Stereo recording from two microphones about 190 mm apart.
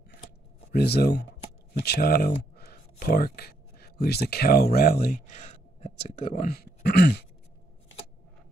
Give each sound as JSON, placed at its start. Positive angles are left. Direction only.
{"t": 0.7, "sound": "speech", "side_deg": 55}